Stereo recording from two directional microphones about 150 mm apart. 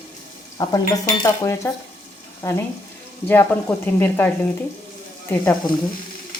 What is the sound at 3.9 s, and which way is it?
Speech, 15° left (ahead or behind).